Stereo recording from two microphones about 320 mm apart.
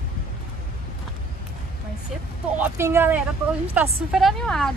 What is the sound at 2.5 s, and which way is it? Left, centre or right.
A woman's voice, centre.